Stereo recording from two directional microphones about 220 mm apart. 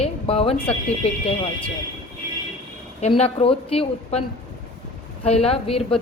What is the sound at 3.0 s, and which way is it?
A woman's voice, 30° left (ahead or behind).